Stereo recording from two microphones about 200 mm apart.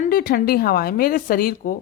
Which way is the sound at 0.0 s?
45° left (ahead or behind).